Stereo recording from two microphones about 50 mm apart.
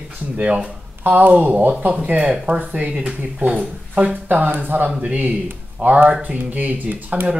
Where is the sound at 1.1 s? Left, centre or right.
Right.